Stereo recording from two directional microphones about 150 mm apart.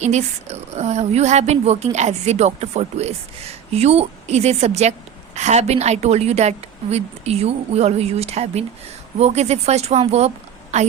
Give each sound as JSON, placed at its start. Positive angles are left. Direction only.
{"t": 0.0, "sound": "a woman's voice", "side_deg": -50}